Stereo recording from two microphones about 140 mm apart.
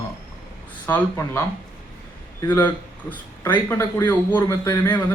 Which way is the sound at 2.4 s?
15° left (ahead or behind).